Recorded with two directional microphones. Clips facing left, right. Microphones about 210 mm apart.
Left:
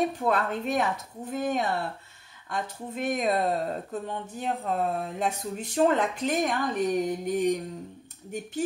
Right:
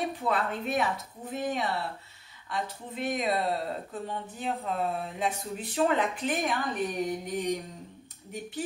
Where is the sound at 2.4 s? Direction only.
45° left (ahead or behind).